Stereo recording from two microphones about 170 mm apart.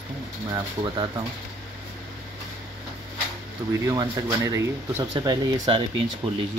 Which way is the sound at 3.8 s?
20° right (ahead or behind).